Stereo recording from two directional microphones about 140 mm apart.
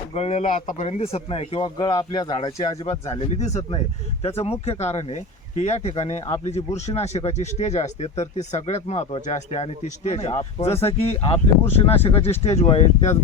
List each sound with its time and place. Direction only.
0.1 s speech: 50° left (ahead or behind)
0.9 s speech: 45° left (ahead or behind)
3.1 s speech: 55° left (ahead or behind)